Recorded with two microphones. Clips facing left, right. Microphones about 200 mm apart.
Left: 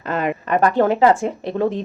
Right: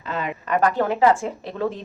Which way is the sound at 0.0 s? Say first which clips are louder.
Left 6 dB; 55° left (ahead or behind).